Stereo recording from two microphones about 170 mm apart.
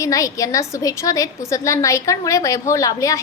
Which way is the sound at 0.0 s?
20° left (ahead or behind).